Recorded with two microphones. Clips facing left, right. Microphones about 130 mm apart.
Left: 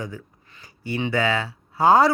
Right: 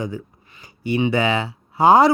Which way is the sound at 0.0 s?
20° right (ahead or behind).